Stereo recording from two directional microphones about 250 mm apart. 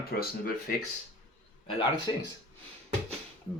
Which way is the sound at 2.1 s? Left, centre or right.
Centre.